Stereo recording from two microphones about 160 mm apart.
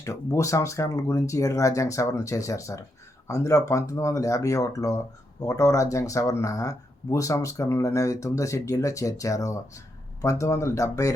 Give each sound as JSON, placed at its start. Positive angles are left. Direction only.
{"t": 0.0, "sound": "speech", "side_deg": 20}